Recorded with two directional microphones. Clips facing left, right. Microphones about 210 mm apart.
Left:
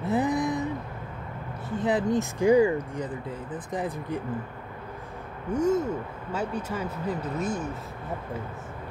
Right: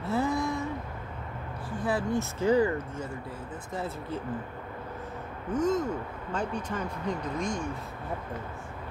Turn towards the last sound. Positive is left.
turn(degrees=5)  # may be behind; listen again after turning